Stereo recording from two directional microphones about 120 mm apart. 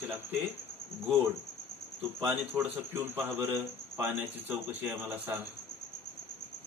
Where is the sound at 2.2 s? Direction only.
15° right (ahead or behind).